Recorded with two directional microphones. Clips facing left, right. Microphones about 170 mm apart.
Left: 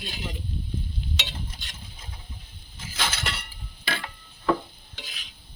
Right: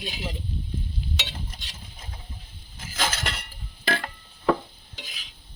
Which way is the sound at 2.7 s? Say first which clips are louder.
Right 2 dB; 45° right (ahead or behind).